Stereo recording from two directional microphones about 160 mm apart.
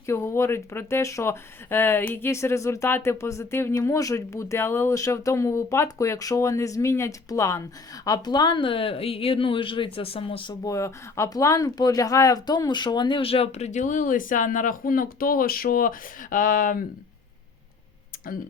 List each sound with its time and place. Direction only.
0.0 s speech: 15° left (ahead or behind); by 16.8 s 60° left (ahead or behind)